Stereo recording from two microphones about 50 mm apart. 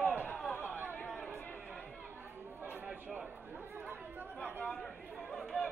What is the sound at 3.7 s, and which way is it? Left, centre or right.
Chatter, right.